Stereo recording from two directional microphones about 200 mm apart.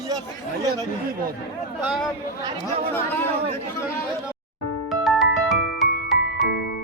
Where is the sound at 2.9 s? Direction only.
10° left (ahead or behind).